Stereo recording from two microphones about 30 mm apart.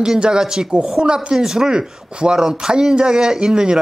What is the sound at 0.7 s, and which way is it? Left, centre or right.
Speech, right.